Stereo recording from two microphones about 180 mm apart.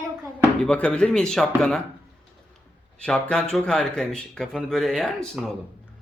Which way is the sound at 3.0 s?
5° left (ahead or behind).